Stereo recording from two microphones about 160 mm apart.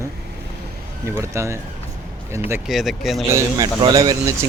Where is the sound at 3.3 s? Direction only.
25° right (ahead or behind).